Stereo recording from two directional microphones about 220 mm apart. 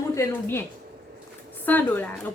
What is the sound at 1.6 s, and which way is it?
Speech, 10° left (ahead or behind).